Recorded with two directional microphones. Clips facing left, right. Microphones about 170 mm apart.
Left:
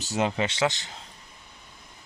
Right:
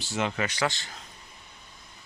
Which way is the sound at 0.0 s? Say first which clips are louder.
Left 3 dB; 40° left (ahead or behind).